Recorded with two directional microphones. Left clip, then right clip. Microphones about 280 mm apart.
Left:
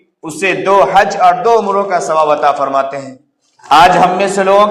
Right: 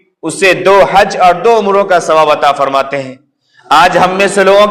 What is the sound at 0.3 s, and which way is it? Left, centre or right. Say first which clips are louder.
A man's voice: right 5 dB; right.